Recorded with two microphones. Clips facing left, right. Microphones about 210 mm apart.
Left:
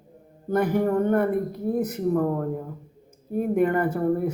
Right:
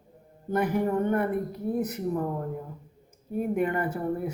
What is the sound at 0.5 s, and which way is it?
Speech, 45° left (ahead or behind).